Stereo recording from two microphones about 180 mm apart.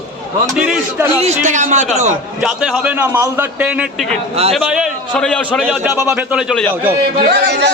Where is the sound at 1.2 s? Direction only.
40° right (ahead or behind).